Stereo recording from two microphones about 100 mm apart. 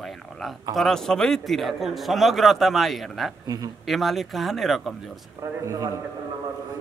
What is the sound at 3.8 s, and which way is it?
A man's voice, centre (ahead or behind).